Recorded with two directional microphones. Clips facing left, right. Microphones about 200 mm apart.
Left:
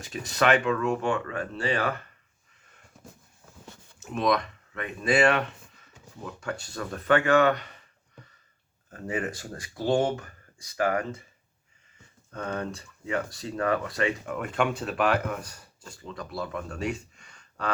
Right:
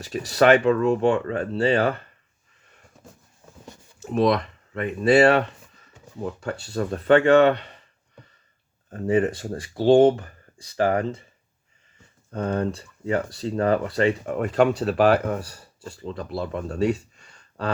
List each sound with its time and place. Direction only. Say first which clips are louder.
0.0 s speech: right 7 dB; 40° right (ahead or behind)
4.0 s speech: right 5 dB; 35° right (ahead or behind)
8.9 s speech: right 10 dB; 30° right (ahead or behind)
12.3 s speech: right 7 dB; 35° right (ahead or behind)